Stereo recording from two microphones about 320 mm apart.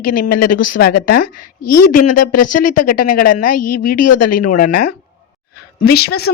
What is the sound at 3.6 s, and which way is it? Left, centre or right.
Speech, left.